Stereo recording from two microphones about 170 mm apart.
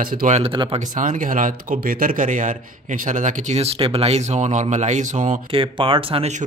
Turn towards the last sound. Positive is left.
turn(degrees=-35)  # may be behind; listen again after turning